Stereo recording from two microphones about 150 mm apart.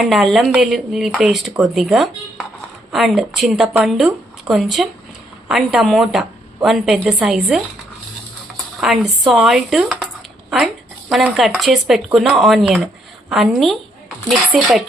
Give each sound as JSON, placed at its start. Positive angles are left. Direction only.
{"t": 0.0, "sound": "a woman's voice", "side_deg": 0}
{"t": 8.8, "sound": "a woman's voice", "side_deg": 0}
{"t": 11.1, "sound": "a woman's voice", "side_deg": 0}